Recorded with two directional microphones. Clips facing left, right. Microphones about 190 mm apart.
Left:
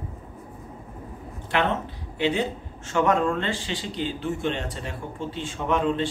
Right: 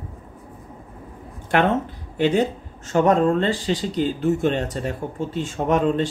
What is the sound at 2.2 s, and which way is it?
Speech, 45° right (ahead or behind).